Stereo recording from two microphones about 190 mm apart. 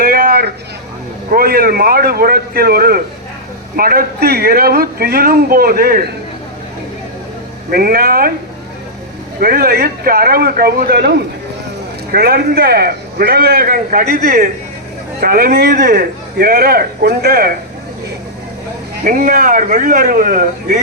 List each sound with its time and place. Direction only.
0.0 s a sound: 50° right (ahead or behind)
1.3 s a man's voice: 50° right (ahead or behind)
7.7 s a man's voice: 50° right (ahead or behind)
9.4 s a man's voice: 50° right (ahead or behind)
12.1 s a man's voice: 55° right (ahead or behind)
19.0 s a man's voice: 45° right (ahead or behind)